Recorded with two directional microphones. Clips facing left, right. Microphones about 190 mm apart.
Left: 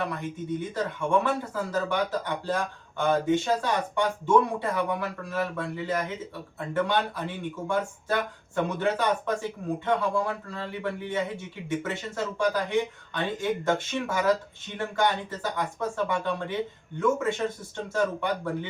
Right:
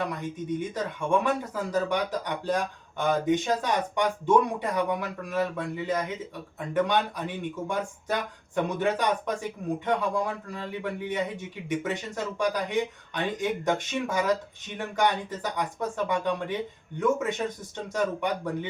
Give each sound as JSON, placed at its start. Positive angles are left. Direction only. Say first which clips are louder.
{"t": 0.0, "sound": "speech", "louder": "even", "side_deg": -15}